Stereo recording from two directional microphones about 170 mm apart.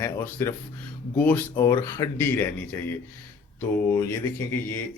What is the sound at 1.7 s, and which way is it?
Speech, 20° left (ahead or behind).